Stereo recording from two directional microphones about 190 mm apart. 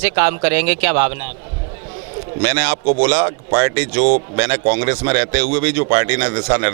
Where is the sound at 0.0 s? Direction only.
15° right (ahead or behind).